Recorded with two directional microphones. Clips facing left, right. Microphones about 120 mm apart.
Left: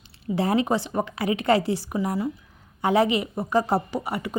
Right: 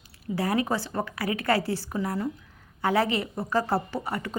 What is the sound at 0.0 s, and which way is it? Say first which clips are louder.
A woman's voice: left 4 dB; 25° left (ahead or behind).